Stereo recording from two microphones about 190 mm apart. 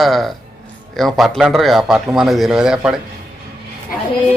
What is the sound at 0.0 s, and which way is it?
Speech, centre (ahead or behind).